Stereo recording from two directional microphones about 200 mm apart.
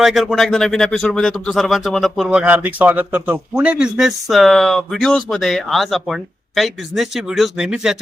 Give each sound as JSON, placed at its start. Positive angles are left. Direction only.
{"t": 0.0, "sound": "speech", "side_deg": 0}